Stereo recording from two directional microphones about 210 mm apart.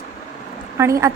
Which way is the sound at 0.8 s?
15° right (ahead or behind).